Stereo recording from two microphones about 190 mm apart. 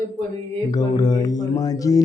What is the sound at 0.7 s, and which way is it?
Speech, 20° left (ahead or behind).